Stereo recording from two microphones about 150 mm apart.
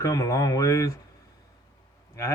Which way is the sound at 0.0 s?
20° left (ahead or behind).